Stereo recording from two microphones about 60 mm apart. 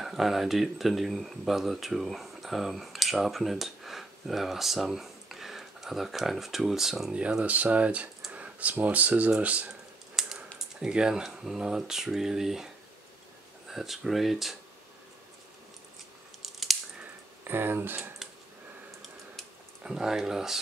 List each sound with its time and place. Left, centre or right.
0.0 s speech: centre
7.2 s speech: centre
9.7 s computer keyboard: centre
10.8 s speech: centre
13.7 s speech: centre
16.4 s a sound: centre
17.5 s speech: right
19.8 s speech: centre